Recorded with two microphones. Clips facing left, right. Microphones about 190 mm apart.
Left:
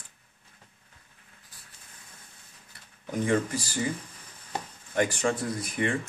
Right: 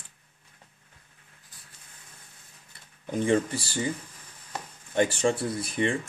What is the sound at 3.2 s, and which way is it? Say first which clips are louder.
Speech: right 2 dB; 30° right (ahead or behind).